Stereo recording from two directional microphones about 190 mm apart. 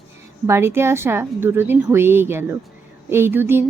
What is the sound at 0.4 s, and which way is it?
A woman's voice, 15° right (ahead or behind).